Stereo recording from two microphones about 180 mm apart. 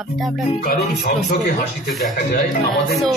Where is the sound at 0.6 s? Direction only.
55° left (ahead or behind).